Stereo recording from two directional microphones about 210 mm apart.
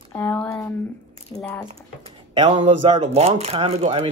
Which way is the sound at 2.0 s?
30° right (ahead or behind).